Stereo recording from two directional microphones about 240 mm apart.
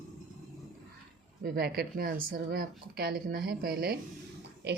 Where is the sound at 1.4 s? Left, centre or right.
Right.